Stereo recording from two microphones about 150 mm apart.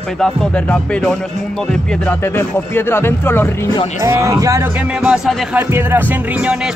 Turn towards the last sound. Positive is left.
turn(degrees=-5)  # may be behind; listen again after turning